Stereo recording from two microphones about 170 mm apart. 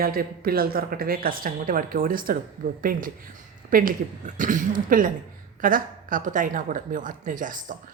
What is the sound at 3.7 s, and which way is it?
A woman's voice, 55° right (ahead or behind).